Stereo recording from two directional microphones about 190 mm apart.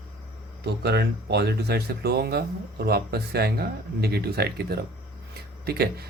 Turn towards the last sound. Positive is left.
turn(degrees=-55)  # may be behind; listen again after turning